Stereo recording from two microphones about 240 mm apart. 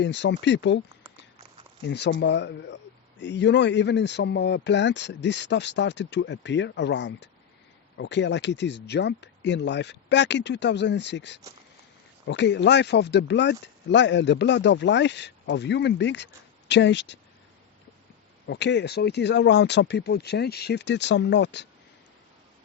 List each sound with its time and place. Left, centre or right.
0.0 s speech: left
1.9 s speech: left
18.4 s speech: left